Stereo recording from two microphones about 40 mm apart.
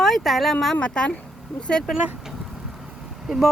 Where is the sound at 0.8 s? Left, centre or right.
Left.